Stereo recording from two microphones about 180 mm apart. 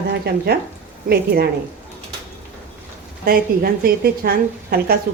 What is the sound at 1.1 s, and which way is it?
Speech, 60° right (ahead or behind).